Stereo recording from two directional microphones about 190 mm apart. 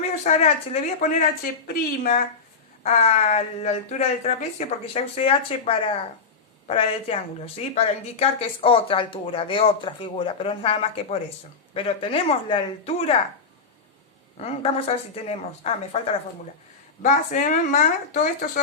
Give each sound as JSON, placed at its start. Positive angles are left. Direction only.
{"t": 0.1, "sound": "speech", "side_deg": 35}
{"t": 1.6, "sound": "speech", "side_deg": 50}
{"t": 2.8, "sound": "a woman's voice", "side_deg": 35}
{"t": 14.3, "sound": "speech", "side_deg": 30}
{"t": 17.0, "sound": "speech", "side_deg": 45}